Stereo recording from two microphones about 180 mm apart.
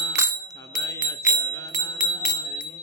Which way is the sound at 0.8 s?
15° left (ahead or behind).